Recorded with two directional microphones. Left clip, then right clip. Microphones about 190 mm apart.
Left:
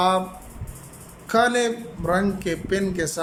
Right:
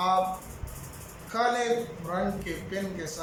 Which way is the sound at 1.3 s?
60° left (ahead or behind).